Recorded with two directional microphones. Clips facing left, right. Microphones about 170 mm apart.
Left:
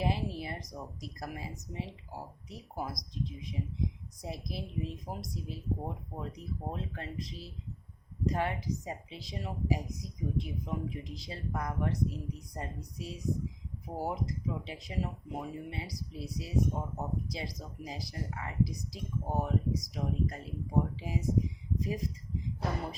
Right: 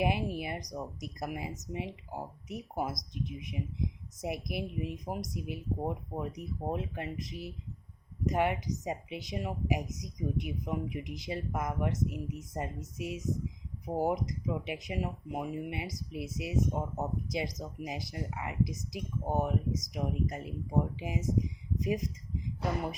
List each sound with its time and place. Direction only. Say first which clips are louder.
0.0 s a woman's voice: right 3 dB; 15° right (ahead or behind)